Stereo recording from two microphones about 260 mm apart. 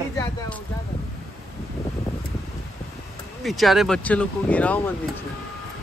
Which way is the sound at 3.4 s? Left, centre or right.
Centre.